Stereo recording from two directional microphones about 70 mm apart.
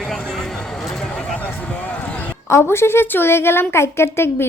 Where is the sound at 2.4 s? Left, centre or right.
Left.